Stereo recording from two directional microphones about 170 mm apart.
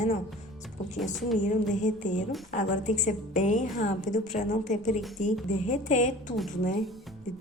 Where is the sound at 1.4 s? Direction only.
45° left (ahead or behind).